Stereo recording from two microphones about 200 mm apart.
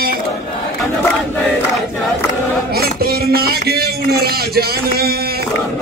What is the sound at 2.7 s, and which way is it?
A man's voice, 50° right (ahead or behind).